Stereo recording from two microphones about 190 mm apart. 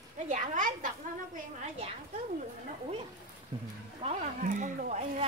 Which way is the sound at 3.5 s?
30° right (ahead or behind).